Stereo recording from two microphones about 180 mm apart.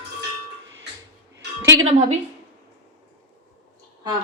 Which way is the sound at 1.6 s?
20° right (ahead or behind).